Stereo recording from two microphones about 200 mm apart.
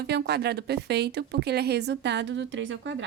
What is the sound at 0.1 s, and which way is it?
A woman's voice, 55° right (ahead or behind).